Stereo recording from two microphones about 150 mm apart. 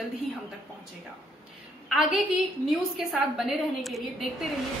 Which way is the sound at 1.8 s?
Centre (ahead or behind).